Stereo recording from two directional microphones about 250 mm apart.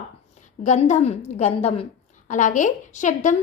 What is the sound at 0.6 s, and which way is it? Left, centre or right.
A woman's voice, left.